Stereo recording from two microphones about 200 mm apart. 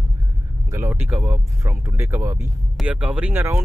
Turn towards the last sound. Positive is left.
turn(degrees=-10)  # may be behind; listen again after turning